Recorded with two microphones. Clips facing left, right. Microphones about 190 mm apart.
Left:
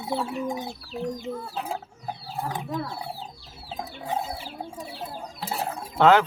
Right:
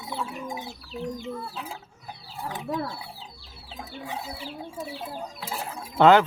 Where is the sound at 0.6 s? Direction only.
45° left (ahead or behind).